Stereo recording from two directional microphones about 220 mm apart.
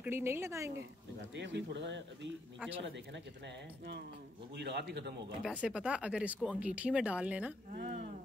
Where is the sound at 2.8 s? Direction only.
55° right (ahead or behind).